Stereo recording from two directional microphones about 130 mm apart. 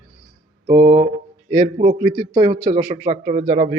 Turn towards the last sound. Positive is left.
turn(degrees=-60)  # may be behind; listen again after turning